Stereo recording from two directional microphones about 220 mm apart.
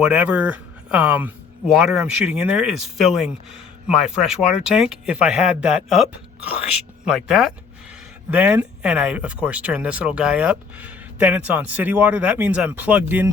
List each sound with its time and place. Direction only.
0.0 s speech: 5° right (ahead or behind)